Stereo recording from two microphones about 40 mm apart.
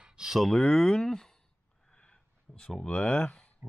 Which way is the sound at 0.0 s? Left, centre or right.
Centre.